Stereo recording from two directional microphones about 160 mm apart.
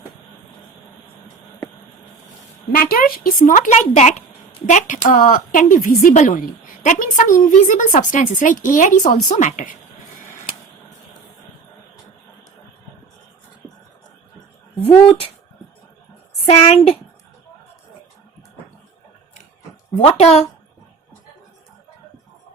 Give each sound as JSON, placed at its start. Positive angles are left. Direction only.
{"t": 2.7, "sound": "a woman's voice", "side_deg": 60}
{"t": 16.5, "sound": "a woman's voice", "side_deg": 40}
{"t": 20.0, "sound": "speech", "side_deg": 40}